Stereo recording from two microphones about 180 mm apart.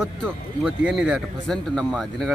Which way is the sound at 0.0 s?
Centre (ahead or behind).